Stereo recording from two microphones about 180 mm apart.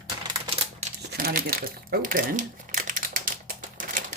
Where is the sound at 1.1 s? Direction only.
55° right (ahead or behind).